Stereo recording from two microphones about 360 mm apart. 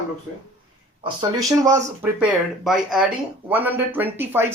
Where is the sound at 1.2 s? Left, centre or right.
Centre.